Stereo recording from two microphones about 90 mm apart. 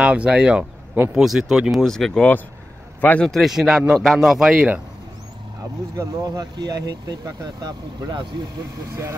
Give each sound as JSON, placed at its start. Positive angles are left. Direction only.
{"t": 0.0, "sound": "speech", "side_deg": -10}
{"t": 3.0, "sound": "a man's voice", "side_deg": 15}
{"t": 3.3, "sound": "speech", "side_deg": 0}
{"t": 5.9, "sound": "speech", "side_deg": -45}